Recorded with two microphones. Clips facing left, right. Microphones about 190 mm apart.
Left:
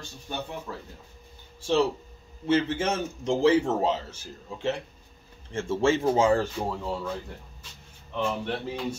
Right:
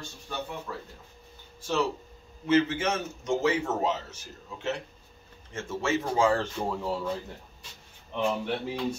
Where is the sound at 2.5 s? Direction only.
30° left (ahead or behind).